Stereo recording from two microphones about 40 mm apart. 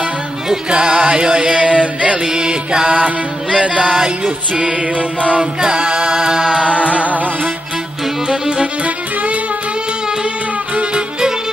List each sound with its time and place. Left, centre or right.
0.7 s music: right
2.2 s music: centre
5.4 s a capella: centre
6.6 s music: right
8.3 s music: centre
8.8 s music: right
10.7 s music: right